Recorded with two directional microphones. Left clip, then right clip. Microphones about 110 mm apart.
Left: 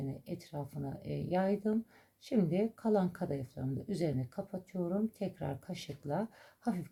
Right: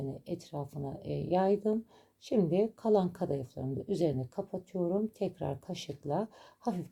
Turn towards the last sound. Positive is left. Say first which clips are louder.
# right 3 dB
turn(degrees=-20)  # may be behind; listen again after turning